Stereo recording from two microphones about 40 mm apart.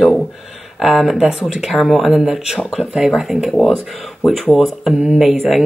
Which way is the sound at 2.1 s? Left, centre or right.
Centre.